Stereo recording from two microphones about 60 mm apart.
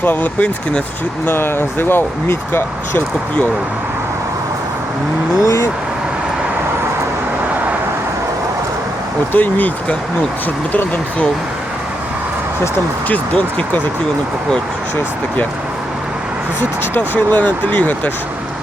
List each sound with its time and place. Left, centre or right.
0.0 s speech: left
1.3 s speech: left
5.4 s speech: left
9.3 s speech: left
13.1 s speech: left
17.2 s speech: left